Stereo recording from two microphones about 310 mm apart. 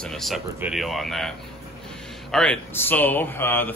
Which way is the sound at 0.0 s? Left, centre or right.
Centre.